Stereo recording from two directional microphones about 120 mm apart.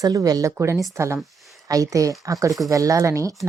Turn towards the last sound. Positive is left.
turn(degrees=-25)  # may be behind; listen again after turning